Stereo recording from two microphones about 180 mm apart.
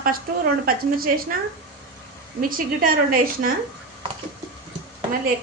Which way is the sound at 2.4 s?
50° right (ahead or behind).